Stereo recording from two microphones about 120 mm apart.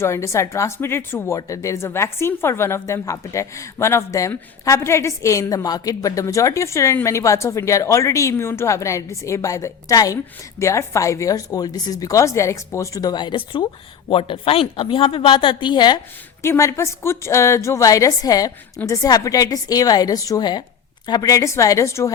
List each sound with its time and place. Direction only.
0.0 s a woman's voice: 25° left (ahead or behind); by 16.0 s 40° left (ahead or behind)
16.4 s a woman's voice: 25° left (ahead or behind)